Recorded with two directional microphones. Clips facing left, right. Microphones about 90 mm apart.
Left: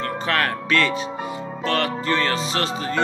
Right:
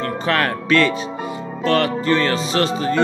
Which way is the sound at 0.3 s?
20° right (ahead or behind).